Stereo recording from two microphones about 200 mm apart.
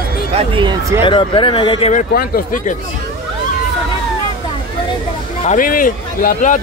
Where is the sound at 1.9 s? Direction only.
45° left (ahead or behind).